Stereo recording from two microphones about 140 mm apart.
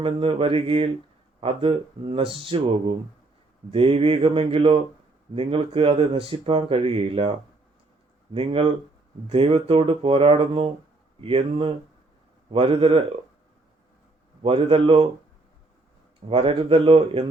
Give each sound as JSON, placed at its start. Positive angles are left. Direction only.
{"t": 0.0, "sound": "speech", "side_deg": -40}
{"t": 14.4, "sound": "speech", "side_deg": -40}
{"t": 16.3, "sound": "speech", "side_deg": -40}